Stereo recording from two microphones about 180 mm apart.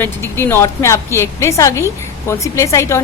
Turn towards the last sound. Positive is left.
turn(degrees=15)  # may be behind; listen again after turning